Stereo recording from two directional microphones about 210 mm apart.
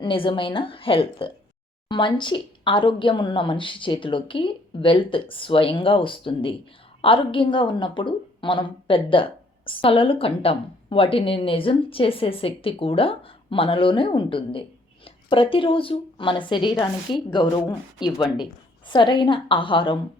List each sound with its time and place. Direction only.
0.0 s a woman's voice: 25° left (ahead or behind)